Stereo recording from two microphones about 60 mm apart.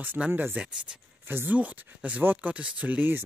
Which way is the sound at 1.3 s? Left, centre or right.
Right.